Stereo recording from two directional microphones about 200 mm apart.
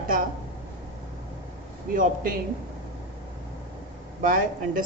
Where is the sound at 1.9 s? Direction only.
45° right (ahead or behind).